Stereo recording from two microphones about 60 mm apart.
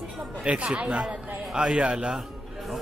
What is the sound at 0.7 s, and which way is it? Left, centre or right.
A man's voice, centre.